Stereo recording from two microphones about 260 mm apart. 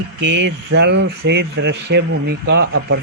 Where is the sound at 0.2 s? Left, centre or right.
Right.